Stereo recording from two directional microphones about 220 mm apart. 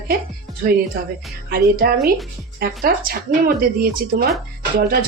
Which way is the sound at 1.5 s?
45° right (ahead or behind).